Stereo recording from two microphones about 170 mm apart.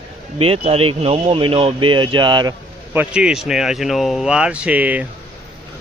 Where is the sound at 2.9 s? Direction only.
10° right (ahead or behind).